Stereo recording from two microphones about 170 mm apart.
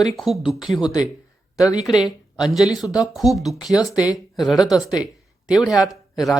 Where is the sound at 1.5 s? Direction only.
20° left (ahead or behind).